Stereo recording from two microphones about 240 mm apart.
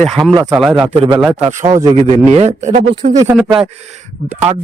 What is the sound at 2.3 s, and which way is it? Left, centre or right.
Speech, right.